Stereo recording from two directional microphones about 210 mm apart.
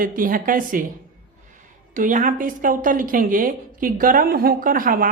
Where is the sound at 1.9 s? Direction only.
40° right (ahead or behind).